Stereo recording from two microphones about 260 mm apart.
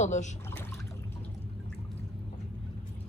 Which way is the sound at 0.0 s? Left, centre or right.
Left.